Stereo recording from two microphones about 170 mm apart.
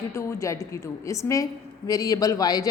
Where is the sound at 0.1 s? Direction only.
15° left (ahead or behind).